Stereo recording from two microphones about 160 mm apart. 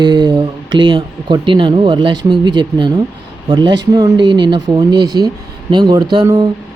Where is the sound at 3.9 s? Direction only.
25° right (ahead or behind).